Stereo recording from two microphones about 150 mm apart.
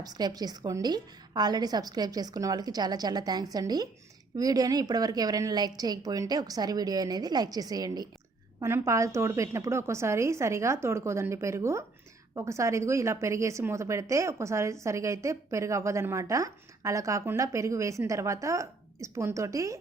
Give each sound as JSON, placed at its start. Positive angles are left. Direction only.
{"t": 0.0, "sound": "a woman's voice", "side_deg": -25}